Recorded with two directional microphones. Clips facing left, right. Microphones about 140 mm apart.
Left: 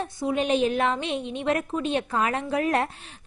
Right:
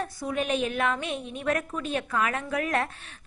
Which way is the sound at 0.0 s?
25° left (ahead or behind).